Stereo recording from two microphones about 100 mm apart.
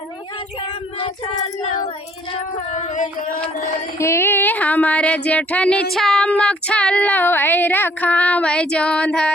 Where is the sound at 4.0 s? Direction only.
25° left (ahead or behind); by 9.3 s 10° left (ahead or behind).